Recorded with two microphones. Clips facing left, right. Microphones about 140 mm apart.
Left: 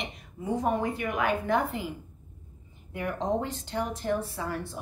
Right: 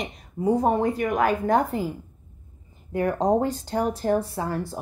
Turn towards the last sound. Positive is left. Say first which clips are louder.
# right 5 dB
turn(degrees=-40)  # may be behind; listen again after turning